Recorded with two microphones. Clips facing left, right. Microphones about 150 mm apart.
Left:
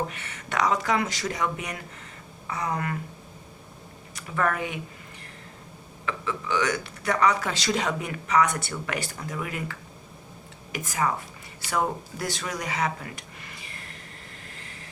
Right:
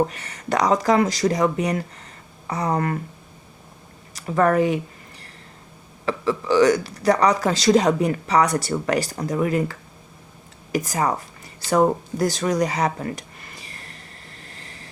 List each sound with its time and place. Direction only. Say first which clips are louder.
0.1 s speech: right 8 dB; 35° right (ahead or behind)
4.1 s speech: right 8 dB; 35° right (ahead or behind)
6.1 s speech: right 8 dB; 35° right (ahead or behind)
14.4 s vehicle: right 2 dB; 35° right (ahead or behind)